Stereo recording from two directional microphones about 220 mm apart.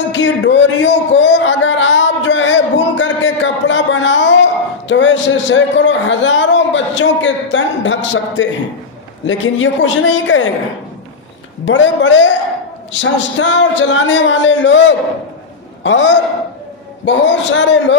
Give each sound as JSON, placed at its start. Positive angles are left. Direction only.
{"t": 0.1, "sound": "a sound", "side_deg": 55}
{"t": 4.8, "sound": "a man's voice", "side_deg": 60}
{"t": 11.6, "sound": "a man's voice", "side_deg": 60}